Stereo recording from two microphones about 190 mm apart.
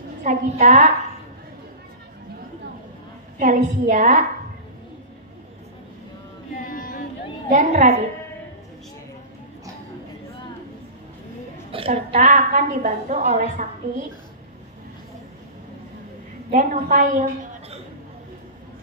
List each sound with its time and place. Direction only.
0.2 s a woman's voice: 40° right (ahead or behind)
3.3 s a woman's voice: 40° right (ahead or behind)
6.7 s a sound: 50° left (ahead or behind)
7.5 s a woman's voice: 35° right (ahead or behind)
11.7 s a woman's voice: 30° right (ahead or behind)
16.4 s a woman's voice: 45° right (ahead or behind)